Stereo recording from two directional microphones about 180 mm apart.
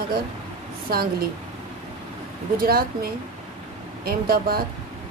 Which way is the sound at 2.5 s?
55° right (ahead or behind).